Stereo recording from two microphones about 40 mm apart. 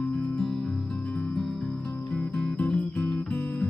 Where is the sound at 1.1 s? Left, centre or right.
Left.